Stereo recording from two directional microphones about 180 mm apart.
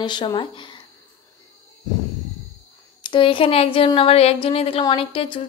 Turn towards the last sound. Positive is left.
turn(degrees=30)  # may be behind; listen again after turning